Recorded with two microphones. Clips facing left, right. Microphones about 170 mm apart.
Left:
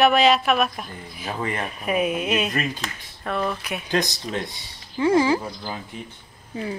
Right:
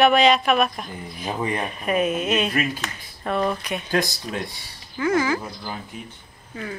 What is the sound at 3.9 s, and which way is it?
Speech, 20° left (ahead or behind).